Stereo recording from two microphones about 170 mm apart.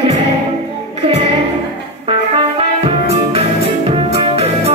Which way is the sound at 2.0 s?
35° right (ahead or behind).